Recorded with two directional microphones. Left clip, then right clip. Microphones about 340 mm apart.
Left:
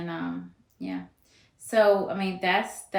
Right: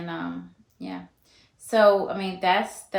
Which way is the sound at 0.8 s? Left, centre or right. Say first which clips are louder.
Left 1 dB; centre.